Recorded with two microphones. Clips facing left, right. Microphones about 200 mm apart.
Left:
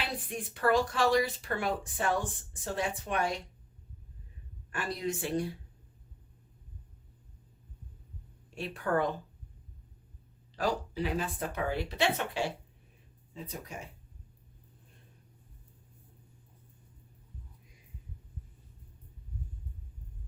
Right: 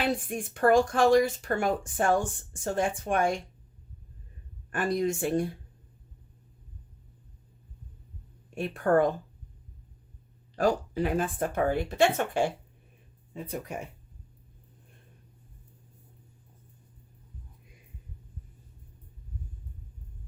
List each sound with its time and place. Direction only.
0.3 s speech: 50° right (ahead or behind)
4.7 s speech: 50° right (ahead or behind)
8.4 s a woman's voice: 50° right (ahead or behind)
10.5 s speech: 50° right (ahead or behind)